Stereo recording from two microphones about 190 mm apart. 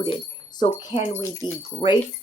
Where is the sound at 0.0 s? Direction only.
25° left (ahead or behind).